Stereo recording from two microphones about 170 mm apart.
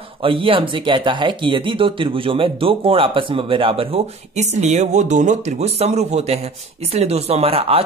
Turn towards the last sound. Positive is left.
turn(degrees=-35)  # may be behind; listen again after turning